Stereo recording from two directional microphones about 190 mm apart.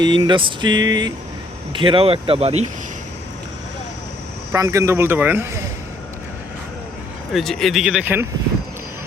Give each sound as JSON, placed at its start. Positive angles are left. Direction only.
{"t": 0.0, "sound": "vehicle", "side_deg": -25}
{"t": 4.5, "sound": "a man's voice", "side_deg": -15}
{"t": 7.3, "sound": "speech", "side_deg": 0}